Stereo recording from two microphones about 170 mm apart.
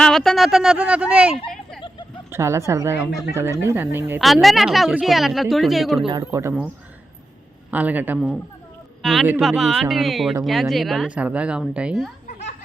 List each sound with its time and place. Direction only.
0.0 s a woman's voice: centre (ahead or behind)
4.2 s a woman's voice: centre (ahead or behind)
6.1 s speech: 20° right (ahead or behind)
7.7 s a woman's voice: 10° right (ahead or behind)
9.0 s a sound: centre (ahead or behind)
9.4 s a woman's voice: centre (ahead or behind)